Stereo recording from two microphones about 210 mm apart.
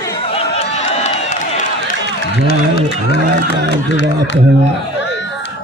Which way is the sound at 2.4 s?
45° left (ahead or behind).